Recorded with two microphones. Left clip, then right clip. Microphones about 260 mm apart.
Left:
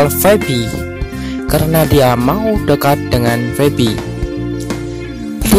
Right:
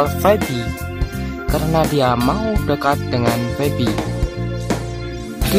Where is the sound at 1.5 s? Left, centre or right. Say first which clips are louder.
Left 5 dB; centre.